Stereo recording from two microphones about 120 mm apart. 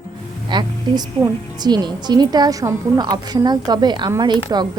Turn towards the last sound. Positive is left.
turn(degrees=-35)  # may be behind; listen again after turning